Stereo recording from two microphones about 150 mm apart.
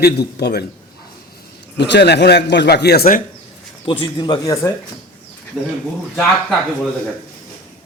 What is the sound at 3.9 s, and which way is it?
Speech, 30° left (ahead or behind).